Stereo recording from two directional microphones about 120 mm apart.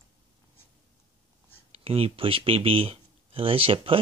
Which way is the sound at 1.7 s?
55° right (ahead or behind).